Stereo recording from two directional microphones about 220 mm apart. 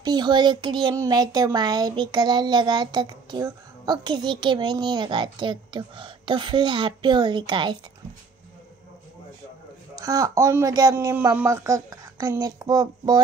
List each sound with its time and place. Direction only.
0.0 s speech: 20° right (ahead or behind)
9.9 s speech: 15° right (ahead or behind)